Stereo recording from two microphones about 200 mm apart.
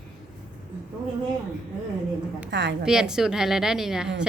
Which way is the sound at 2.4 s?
60° right (ahead or behind).